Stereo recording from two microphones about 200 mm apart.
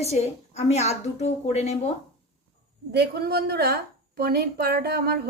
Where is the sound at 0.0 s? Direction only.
35° left (ahead or behind).